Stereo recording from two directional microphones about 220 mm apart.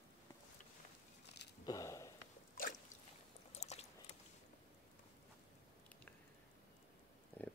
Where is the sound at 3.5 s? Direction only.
30° left (ahead or behind).